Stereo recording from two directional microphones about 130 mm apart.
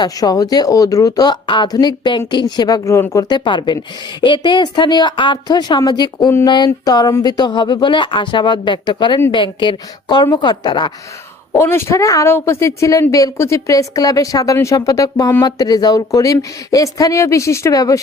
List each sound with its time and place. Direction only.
0.0 s speech: 30° left (ahead or behind)
11.5 s speech: 20° left (ahead or behind)